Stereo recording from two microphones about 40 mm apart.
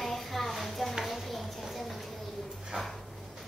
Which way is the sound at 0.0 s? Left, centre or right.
Centre.